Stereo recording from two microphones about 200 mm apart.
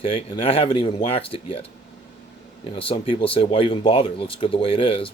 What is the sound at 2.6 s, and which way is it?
Speech, 25° left (ahead or behind).